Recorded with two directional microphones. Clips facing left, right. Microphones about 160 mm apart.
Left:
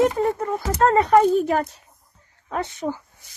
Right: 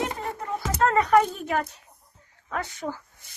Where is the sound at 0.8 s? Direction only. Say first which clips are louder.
Left 4 dB; 30° left (ahead or behind).